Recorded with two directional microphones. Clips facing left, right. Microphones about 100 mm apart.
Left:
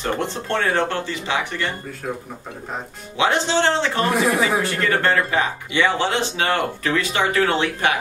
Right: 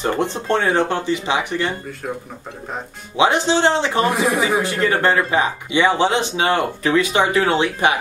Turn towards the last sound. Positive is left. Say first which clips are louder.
# right 3 dB
turn(degrees=-15)  # may be behind; listen again after turning